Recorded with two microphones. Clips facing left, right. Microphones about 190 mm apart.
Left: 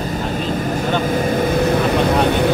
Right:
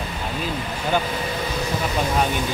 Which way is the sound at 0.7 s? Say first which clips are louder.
Left 4 dB; 45° left (ahead or behind).